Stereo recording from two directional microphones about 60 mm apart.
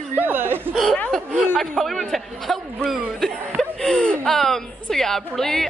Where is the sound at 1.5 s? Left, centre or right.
Centre.